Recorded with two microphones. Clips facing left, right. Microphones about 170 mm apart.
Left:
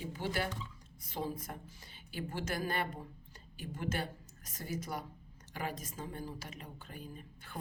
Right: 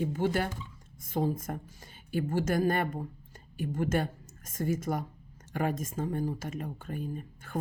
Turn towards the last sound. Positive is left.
turn(degrees=-45)  # may be behind; listen again after turning